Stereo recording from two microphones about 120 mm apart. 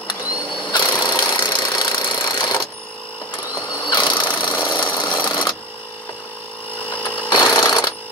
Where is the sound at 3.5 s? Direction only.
35° left (ahead or behind).